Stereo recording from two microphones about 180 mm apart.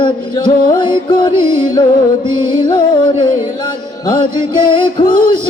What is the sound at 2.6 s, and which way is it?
Music, 25° left (ahead or behind).